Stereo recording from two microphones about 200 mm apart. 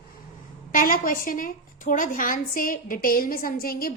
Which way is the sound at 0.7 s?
45° left (ahead or behind).